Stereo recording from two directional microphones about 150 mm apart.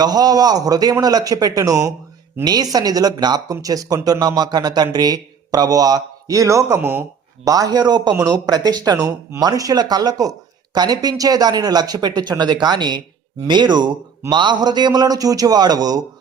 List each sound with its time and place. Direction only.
0.0 s speech: 25° right (ahead or behind)